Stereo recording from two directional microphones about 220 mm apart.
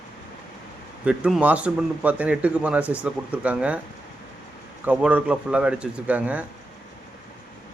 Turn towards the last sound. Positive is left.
turn(degrees=-5)  # may be behind; listen again after turning